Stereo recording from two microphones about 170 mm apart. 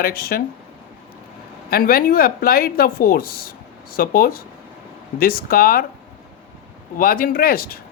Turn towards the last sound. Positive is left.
turn(degrees=60)  # may be behind; listen again after turning